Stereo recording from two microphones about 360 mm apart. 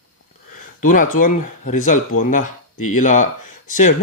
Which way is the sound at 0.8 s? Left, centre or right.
Left.